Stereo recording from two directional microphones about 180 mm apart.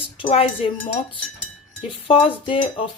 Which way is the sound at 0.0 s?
30° left (ahead or behind).